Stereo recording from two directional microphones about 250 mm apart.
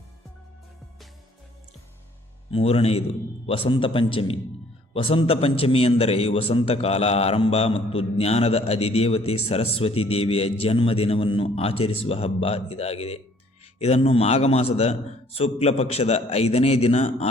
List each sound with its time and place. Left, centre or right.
2.5 s a man's voice: left